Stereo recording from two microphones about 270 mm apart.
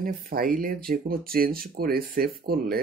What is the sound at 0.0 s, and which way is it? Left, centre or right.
Speech, right.